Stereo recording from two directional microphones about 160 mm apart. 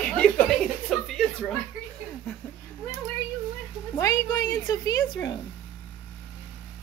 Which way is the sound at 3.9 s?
20° left (ahead or behind).